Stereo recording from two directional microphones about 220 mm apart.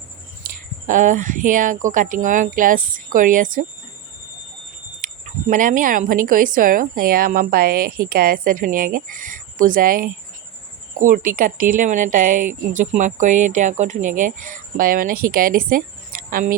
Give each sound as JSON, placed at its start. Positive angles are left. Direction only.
{"t": 0.4, "sound": "speech", "side_deg": -35}
{"t": 4.9, "sound": "speech", "side_deg": -35}